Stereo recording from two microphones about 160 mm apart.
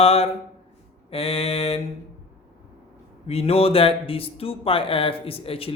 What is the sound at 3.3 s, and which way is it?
Speech, 40° left (ahead or behind).